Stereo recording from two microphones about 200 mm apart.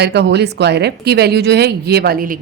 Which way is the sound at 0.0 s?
55° right (ahead or behind).